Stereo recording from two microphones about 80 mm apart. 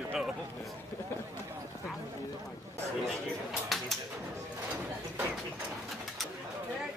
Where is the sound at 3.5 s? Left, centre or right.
Centre.